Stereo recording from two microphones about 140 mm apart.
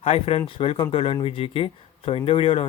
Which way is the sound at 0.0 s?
45° left (ahead or behind).